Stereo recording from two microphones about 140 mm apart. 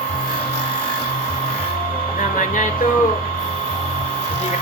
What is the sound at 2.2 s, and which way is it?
Speech, 65° left (ahead or behind).